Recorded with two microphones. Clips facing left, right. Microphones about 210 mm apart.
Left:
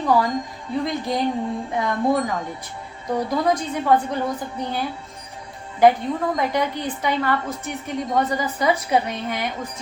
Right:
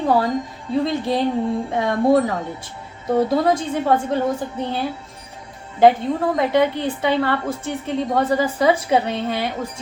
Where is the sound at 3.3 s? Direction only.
25° right (ahead or behind).